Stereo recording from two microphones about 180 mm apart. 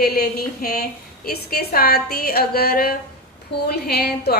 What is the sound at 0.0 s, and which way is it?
A woman's voice, 60° left (ahead or behind).